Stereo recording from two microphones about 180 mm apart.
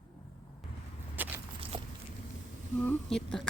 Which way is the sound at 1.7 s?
30° right (ahead or behind).